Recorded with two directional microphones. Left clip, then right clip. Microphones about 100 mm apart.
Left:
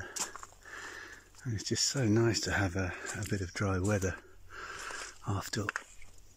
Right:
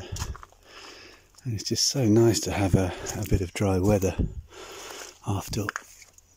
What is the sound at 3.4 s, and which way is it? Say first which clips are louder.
Speech: right 10 dB; 45° right (ahead or behind).